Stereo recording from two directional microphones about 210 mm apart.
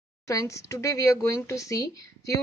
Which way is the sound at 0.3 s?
15° left (ahead or behind).